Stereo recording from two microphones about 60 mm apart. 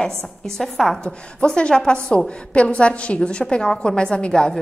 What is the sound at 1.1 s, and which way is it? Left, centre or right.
A woman's voice, centre.